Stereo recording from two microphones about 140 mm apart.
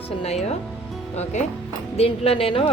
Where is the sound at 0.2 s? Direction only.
50° left (ahead or behind).